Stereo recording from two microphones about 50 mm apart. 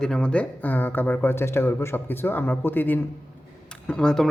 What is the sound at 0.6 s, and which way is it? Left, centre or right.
Speech, left.